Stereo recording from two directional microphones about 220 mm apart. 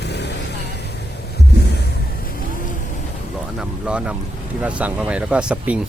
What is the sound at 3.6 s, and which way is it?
Speech, 5° right (ahead or behind).